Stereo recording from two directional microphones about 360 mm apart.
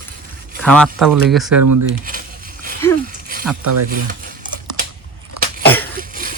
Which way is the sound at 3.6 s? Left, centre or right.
Right.